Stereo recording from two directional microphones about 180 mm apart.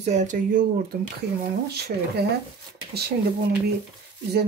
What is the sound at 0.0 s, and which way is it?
Speech, 40° right (ahead or behind).